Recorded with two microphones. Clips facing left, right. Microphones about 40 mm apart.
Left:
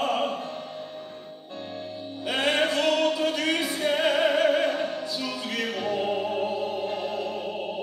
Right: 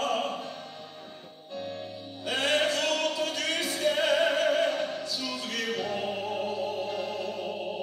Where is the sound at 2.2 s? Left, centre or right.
Left.